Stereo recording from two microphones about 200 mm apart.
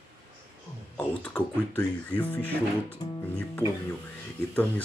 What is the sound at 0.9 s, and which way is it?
Speech, 10° left (ahead or behind).